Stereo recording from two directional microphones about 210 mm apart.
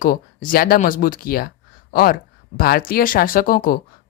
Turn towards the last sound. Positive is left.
turn(degrees=40)  # may be behind; listen again after turning